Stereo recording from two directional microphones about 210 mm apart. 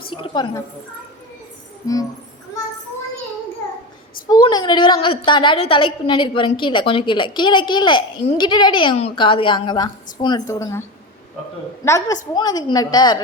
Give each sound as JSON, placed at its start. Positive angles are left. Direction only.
{"t": 0.1, "sound": "a woman's voice", "side_deg": 25}
{"t": 1.8, "sound": "a woman's voice", "side_deg": 15}
{"t": 4.3, "sound": "a woman's voice", "side_deg": 20}
{"t": 11.9, "sound": "a woman's voice", "side_deg": 15}